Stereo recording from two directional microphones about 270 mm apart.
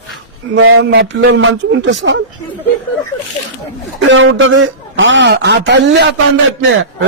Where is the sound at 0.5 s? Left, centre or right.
Right.